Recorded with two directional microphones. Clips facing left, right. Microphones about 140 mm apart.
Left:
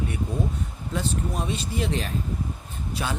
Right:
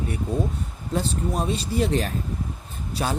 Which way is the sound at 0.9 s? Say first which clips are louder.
Right 3 dB; 35° right (ahead or behind).